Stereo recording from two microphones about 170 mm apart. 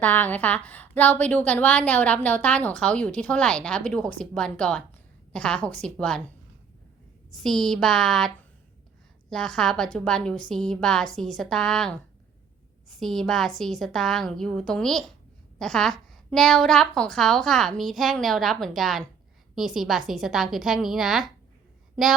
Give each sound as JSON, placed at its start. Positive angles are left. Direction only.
{"t": 0.0, "sound": "a woman's voice", "side_deg": 10}
{"t": 7.4, "sound": "a woman's voice", "side_deg": 0}
{"t": 13.0, "sound": "a woman's voice", "side_deg": 0}